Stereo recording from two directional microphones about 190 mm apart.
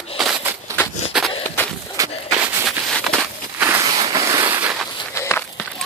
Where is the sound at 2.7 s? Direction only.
5° left (ahead or behind).